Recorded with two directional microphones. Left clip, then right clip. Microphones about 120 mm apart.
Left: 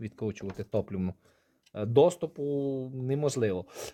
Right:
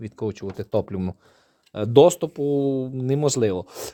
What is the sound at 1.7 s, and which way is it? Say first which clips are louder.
Speech: right 8 dB; 40° right (ahead or behind).